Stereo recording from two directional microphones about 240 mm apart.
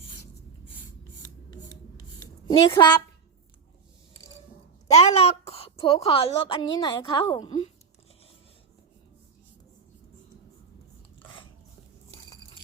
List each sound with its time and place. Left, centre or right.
2.5 s a woman's voice: centre
4.9 s a woman's voice: left
11.2 s a sound: left